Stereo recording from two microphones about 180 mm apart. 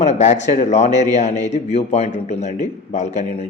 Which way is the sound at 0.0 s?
40° left (ahead or behind).